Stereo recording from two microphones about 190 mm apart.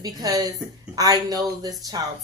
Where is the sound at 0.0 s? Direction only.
20° right (ahead or behind).